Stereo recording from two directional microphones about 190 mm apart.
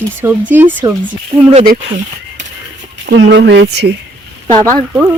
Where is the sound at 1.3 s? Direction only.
30° right (ahead or behind).